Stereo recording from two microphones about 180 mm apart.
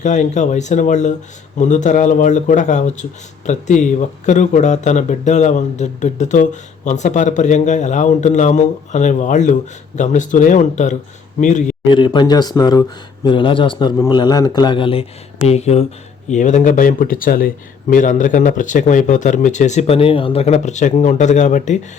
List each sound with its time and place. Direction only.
0.0 s speech: 40° left (ahead or behind)
11.9 s a man's voice: 25° left (ahead or behind); by 21.8 s 40° left (ahead or behind)